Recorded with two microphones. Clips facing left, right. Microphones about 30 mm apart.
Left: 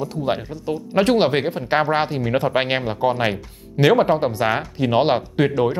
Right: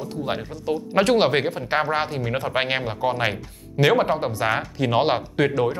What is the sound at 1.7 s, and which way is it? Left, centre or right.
Speech, centre.